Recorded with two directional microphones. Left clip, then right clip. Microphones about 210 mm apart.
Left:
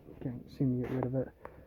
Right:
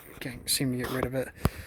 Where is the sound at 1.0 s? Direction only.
15° right (ahead or behind).